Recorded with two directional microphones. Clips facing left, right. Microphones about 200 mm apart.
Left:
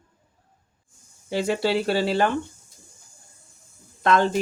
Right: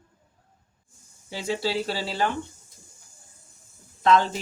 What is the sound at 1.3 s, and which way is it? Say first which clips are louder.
Speech: left 5 dB; 60° left (ahead or behind).